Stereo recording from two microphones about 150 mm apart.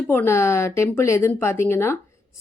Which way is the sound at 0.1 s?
15° left (ahead or behind).